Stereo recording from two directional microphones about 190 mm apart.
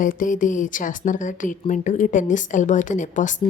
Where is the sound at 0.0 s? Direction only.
45° left (ahead or behind).